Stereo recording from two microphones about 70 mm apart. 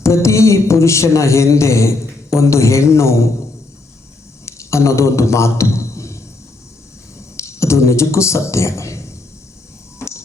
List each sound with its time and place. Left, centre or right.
0.0 s a sound: left
4.5 s a man's voice: left
7.4 s a man's voice: left